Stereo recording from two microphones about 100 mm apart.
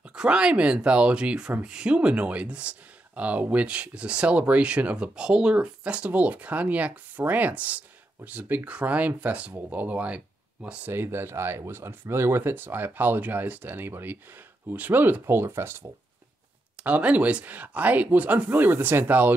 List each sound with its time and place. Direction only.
0.1 s speech: 10° right (ahead or behind); by 15.9 s 25° right (ahead or behind)
16.8 s speech: 15° right (ahead or behind)